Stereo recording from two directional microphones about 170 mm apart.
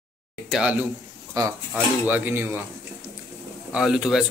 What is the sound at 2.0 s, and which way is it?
Speech, 10° right (ahead or behind).